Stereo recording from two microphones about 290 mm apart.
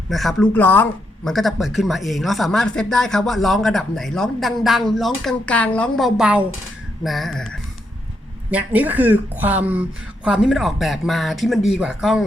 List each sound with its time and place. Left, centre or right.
0.1 s speech: centre